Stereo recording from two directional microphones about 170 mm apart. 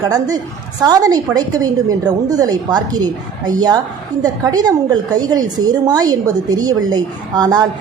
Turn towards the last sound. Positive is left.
turn(degrees=-25)  # may be behind; listen again after turning